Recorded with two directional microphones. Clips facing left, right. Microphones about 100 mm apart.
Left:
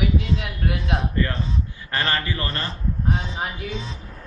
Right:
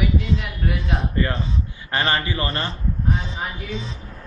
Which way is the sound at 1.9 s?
15° right (ahead or behind).